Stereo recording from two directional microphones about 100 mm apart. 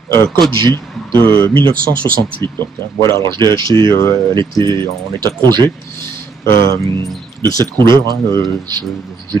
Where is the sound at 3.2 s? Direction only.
45° right (ahead or behind).